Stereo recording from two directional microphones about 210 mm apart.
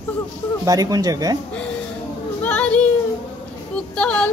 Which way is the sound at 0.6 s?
15° right (ahead or behind).